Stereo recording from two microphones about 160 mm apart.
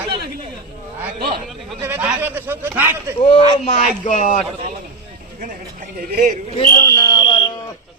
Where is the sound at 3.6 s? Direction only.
45° left (ahead or behind).